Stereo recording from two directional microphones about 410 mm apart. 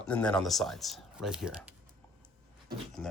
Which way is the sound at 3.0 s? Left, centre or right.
Centre.